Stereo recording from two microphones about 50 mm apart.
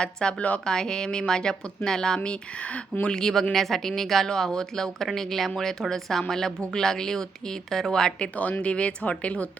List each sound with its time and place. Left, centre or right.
0.0 s speech: centre
8.4 s speech: left